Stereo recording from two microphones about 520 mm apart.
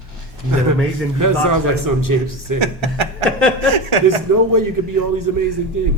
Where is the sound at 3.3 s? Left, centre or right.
Centre.